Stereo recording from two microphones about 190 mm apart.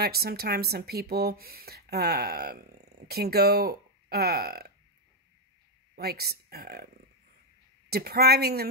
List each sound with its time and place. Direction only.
0.0 s speech: 55° right (ahead or behind)
5.9 s speech: 55° right (ahead or behind)
7.9 s speech: 55° right (ahead or behind)